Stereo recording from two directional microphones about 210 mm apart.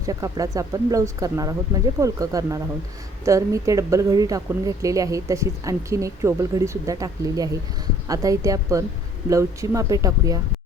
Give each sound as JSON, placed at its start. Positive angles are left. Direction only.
{"t": 0.0, "sound": "a woman's voice", "side_deg": -15}